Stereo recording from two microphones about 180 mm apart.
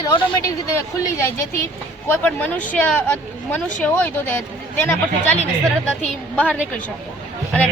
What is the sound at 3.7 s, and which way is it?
Speech, 10° left (ahead or behind).